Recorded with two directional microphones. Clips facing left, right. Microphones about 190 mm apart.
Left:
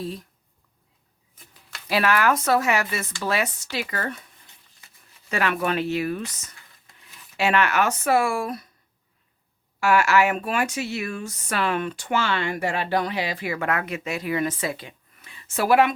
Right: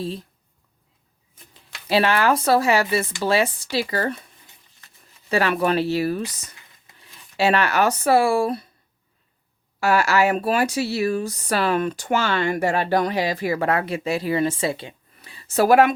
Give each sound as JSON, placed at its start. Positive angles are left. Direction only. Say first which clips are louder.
{"t": 0.0, "sound": "speech", "louder": "right 3 dB", "side_deg": -30}
{"t": 1.5, "sound": "speech", "louder": "right 5 dB", "side_deg": -30}
{"t": 5.3, "sound": "speech", "louder": "right 4 dB", "side_deg": -35}
{"t": 9.8, "sound": "speech", "louder": "right 1 dB", "side_deg": -35}